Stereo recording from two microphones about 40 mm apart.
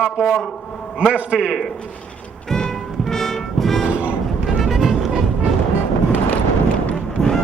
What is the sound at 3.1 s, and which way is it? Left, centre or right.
Music, centre.